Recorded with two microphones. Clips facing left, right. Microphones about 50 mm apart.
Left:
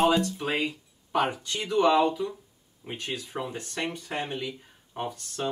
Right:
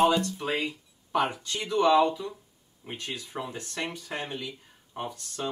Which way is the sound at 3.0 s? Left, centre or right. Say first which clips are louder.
Left 2 dB; left.